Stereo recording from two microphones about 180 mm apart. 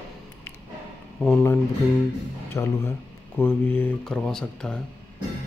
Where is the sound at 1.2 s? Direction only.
5° left (ahead or behind).